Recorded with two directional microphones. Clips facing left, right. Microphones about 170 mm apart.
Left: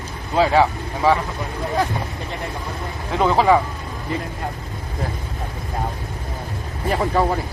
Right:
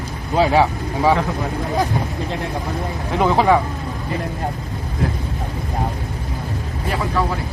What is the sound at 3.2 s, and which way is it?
Speech, 5° right (ahead or behind).